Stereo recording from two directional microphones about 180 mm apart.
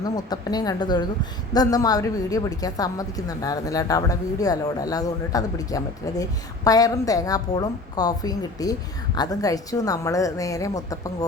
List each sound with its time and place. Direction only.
0.0 s a woman's voice: 20° left (ahead or behind)